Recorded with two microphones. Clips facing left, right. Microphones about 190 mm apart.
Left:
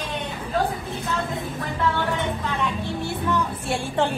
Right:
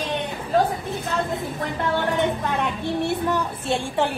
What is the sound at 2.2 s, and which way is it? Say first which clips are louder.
Vehicle: right 3 dB; 60° right (ahead or behind).